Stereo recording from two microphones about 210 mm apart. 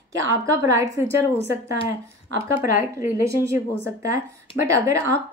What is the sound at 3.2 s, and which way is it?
Speech, 15° right (ahead or behind).